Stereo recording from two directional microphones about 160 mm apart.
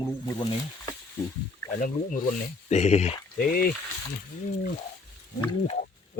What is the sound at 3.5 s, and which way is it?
Speech, 65° left (ahead or behind).